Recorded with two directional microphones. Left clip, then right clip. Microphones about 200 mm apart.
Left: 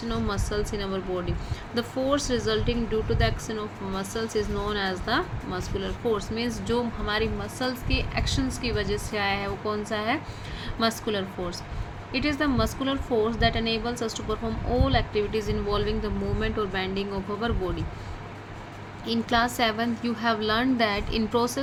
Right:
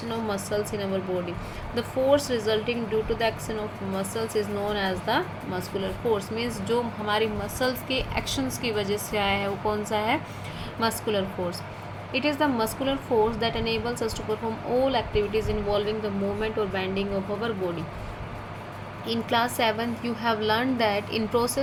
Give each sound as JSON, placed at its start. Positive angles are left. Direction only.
{"t": 0.1, "sound": "speech", "side_deg": 10}
{"t": 19.3, "sound": "speech", "side_deg": 15}